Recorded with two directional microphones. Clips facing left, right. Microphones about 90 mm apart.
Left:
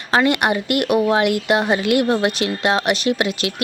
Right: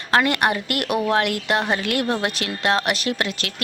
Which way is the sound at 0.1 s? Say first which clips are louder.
Left 2 dB; 5° left (ahead or behind).